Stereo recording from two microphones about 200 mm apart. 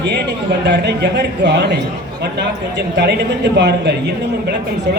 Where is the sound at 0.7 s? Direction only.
55° right (ahead or behind).